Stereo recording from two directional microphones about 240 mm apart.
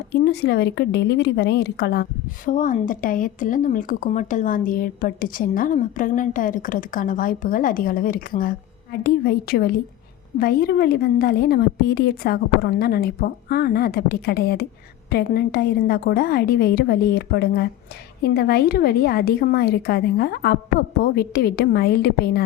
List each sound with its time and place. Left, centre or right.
0.1 s a woman's voice: left